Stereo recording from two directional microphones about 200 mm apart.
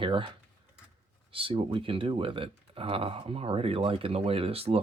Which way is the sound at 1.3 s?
25° right (ahead or behind).